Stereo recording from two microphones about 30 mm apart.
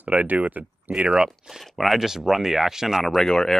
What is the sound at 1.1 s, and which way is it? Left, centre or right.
Speech, centre.